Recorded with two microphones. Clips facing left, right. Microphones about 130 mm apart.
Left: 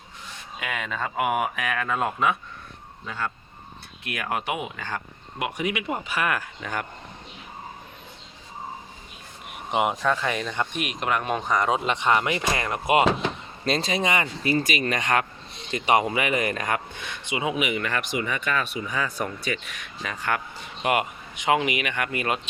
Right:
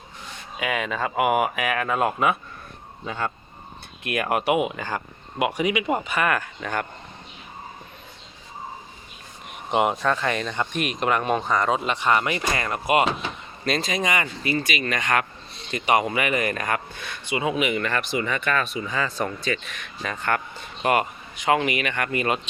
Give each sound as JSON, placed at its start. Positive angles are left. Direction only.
{"t": 0.6, "sound": "speech", "side_deg": -5}
{"t": 3.1, "sound": "speech", "side_deg": -20}
{"t": 9.5, "sound": "a sound", "side_deg": 5}
{"t": 10.0, "sound": "speech", "side_deg": 5}
{"t": 11.4, "sound": "speech", "side_deg": 15}